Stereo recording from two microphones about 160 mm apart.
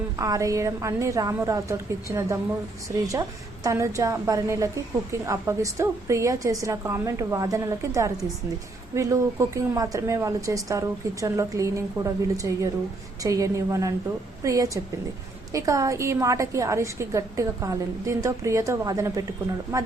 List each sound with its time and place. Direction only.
0.2 s a woman's voice: 20° right (ahead or behind)